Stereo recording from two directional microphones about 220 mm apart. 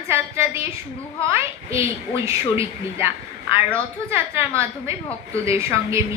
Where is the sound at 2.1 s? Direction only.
15° right (ahead or behind).